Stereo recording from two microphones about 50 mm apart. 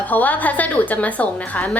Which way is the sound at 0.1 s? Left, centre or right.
Left.